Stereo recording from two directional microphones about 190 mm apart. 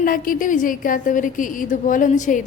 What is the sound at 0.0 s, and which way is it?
A woman's voice, 45° left (ahead or behind).